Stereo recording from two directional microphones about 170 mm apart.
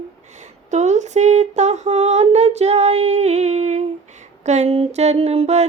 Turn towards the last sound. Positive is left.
turn(degrees=-40)  # may be behind; listen again after turning